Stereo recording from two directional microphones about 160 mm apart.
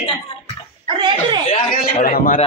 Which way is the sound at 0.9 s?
30° right (ahead or behind).